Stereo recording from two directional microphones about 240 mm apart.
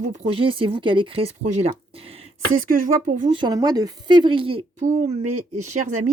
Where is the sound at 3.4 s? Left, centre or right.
Centre.